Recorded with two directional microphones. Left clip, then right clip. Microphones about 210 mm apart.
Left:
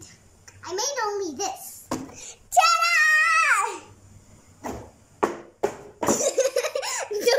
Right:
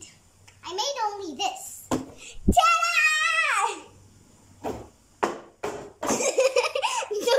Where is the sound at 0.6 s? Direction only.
Centre (ahead or behind).